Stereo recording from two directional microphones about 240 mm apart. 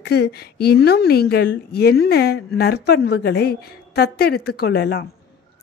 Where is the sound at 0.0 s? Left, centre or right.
Left.